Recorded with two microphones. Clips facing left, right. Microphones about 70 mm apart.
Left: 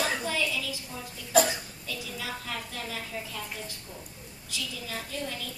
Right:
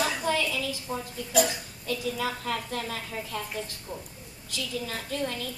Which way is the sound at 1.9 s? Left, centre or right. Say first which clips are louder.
Right 7 dB; right.